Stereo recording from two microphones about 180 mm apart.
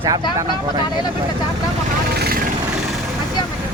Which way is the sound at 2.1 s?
60° right (ahead or behind).